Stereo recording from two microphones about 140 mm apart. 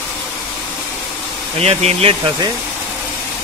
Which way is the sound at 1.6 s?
50° right (ahead or behind).